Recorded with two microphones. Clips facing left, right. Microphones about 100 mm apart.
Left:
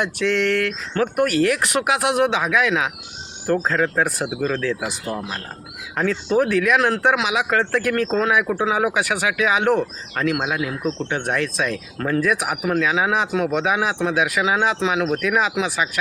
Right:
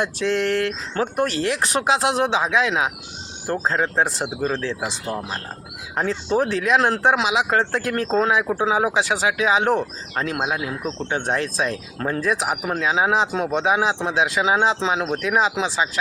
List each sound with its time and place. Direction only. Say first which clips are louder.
0.0 s speech: left 1 dB; 30° right (ahead or behind)